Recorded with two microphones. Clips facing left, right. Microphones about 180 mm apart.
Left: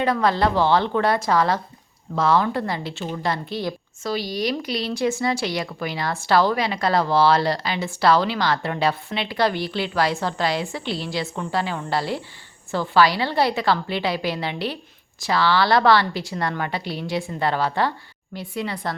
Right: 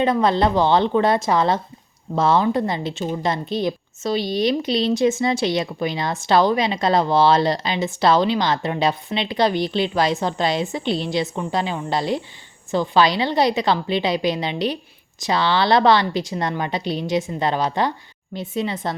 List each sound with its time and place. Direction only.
0.0 s a woman's voice: 20° right (ahead or behind)